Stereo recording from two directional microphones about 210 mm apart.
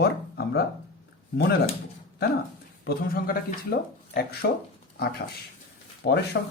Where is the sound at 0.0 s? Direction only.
50° left (ahead or behind).